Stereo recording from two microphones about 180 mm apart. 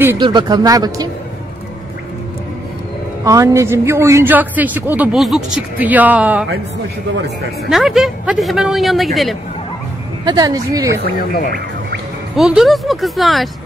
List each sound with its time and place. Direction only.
0.2 s speech: 25° right (ahead or behind)
3.3 s a man's voice: 15° right (ahead or behind)
7.7 s a man's voice: centre (ahead or behind)
10.2 s speech: 20° right (ahead or behind)
12.4 s a man's voice: centre (ahead or behind)